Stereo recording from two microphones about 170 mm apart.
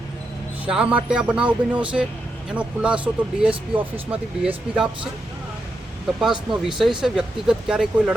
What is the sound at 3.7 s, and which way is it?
Speech, 35° right (ahead or behind).